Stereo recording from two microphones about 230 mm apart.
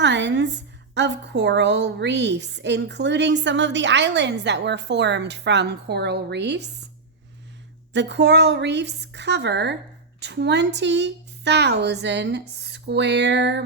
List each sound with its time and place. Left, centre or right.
0.0 s a sound: right
0.9 s a woman's voice: right
7.9 s a woman's voice: right